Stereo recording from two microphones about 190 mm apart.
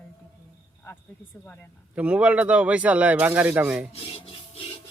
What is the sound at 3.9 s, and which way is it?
Music, 30° left (ahead or behind).